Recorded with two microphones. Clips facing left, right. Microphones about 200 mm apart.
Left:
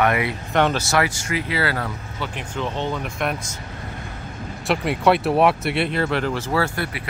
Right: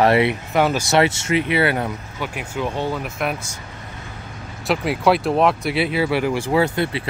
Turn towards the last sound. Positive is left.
turn(degrees=-20)  # may be behind; listen again after turning